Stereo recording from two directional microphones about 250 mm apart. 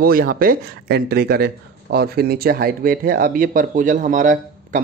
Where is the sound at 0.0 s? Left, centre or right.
Right.